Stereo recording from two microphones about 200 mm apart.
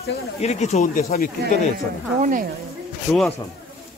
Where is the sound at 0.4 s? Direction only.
35° left (ahead or behind).